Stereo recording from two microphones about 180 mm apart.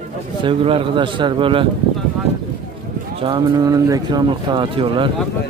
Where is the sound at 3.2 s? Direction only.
25° right (ahead or behind).